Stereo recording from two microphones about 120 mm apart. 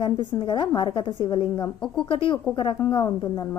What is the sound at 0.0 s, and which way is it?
A woman's voice, 40° left (ahead or behind).